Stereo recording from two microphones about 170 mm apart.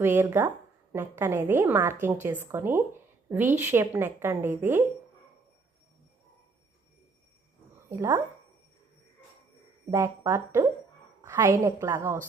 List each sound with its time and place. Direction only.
0.0 s a woman's voice: 15° right (ahead or behind)
7.9 s a woman's voice: 15° right (ahead or behind)
9.9 s a woman's voice: 15° right (ahead or behind)